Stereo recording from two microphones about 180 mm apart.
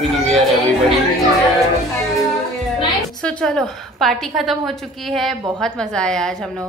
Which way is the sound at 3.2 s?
5° left (ahead or behind).